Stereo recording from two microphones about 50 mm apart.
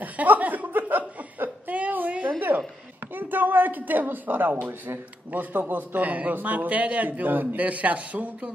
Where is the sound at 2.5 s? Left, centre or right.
Right.